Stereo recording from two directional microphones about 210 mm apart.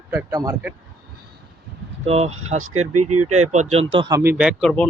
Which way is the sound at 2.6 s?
85° right.